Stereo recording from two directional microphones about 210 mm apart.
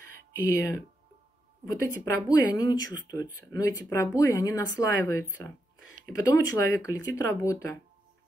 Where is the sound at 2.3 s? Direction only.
15° left (ahead or behind).